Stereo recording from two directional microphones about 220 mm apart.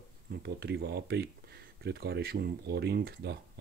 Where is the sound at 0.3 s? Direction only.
50° right (ahead or behind).